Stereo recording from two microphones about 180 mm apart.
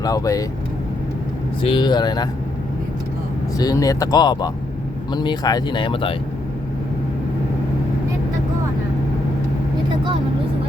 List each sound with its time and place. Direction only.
0.0 s speech: 20° left (ahead or behind)
1.6 s speech: 25° left (ahead or behind)
3.6 s speech: 20° left (ahead or behind)